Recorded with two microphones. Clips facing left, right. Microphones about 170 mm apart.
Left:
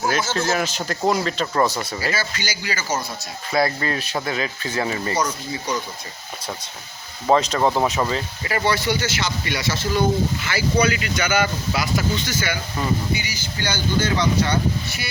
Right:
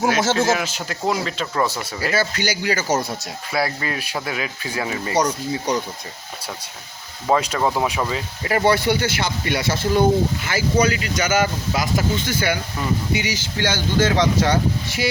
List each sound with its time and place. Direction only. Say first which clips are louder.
0.0 s speech: right 4 dB; 90° right
0.5 s speech: left 1 dB; 5° right (ahead or behind)
2.0 s speech: right 4 dB; 60° right (ahead or behind)
3.5 s speech: left 2 dB; 10° right (ahead or behind)
5.2 s speech: right 4 dB; 35° right (ahead or behind)
7.3 s speech: left 1 dB; 10° right (ahead or behind)
8.4 s speech: right 4 dB; 50° right (ahead or behind)
10.4 s speech: right 1 dB; 45° right (ahead or behind)
13.1 s speech: right 5 dB; 90° right